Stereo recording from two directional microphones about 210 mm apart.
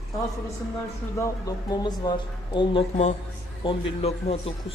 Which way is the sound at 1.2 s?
15° left (ahead or behind).